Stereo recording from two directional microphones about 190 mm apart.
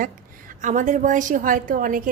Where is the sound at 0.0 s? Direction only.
40° right (ahead or behind).